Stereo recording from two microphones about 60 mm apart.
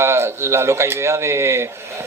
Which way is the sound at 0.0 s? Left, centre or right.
Right.